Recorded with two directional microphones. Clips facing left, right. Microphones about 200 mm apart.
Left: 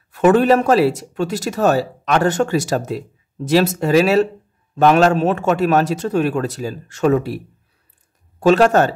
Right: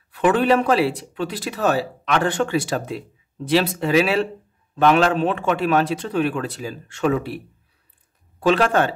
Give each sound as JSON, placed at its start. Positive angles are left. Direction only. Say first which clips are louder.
{"t": 0.1, "sound": "a man's voice", "louder": "left 5 dB", "side_deg": 45}
{"t": 8.4, "sound": "speech", "louder": "left 5 dB", "side_deg": 45}